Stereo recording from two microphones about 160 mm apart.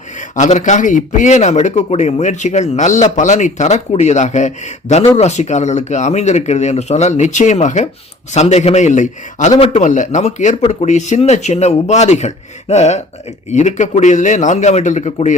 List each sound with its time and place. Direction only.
0.2 s speech: 50° left (ahead or behind)